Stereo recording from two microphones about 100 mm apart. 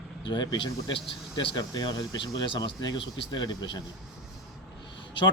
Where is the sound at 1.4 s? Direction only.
60° left (ahead or behind).